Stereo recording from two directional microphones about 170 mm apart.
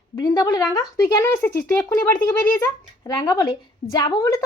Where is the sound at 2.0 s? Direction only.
10° left (ahead or behind).